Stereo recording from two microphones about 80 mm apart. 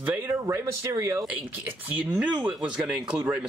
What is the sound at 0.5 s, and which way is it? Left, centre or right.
Speech, right.